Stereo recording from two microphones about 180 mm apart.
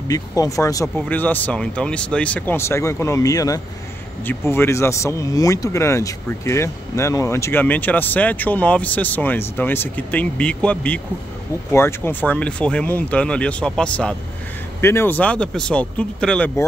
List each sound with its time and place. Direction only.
0.1 s speech: 20° left (ahead or behind)